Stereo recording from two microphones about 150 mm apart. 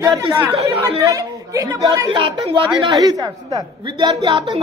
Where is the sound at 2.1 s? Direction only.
35° right (ahead or behind).